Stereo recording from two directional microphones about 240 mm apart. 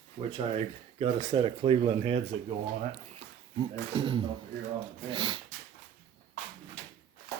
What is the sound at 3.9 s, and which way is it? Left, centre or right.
Speech, right.